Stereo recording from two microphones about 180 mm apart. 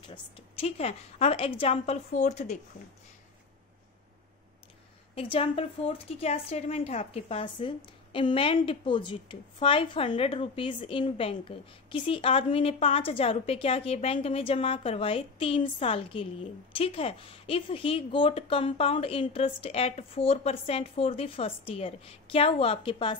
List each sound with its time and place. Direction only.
0.0 s a woman's voice: 30° left (ahead or behind)
5.1 s a woman's voice: 30° left (ahead or behind)